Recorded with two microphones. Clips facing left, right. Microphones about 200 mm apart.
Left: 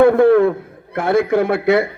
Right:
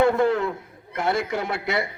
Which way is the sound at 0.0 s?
55° left (ahead or behind).